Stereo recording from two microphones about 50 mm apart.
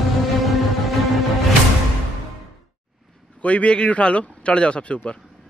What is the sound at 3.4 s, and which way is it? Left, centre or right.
Speech, left.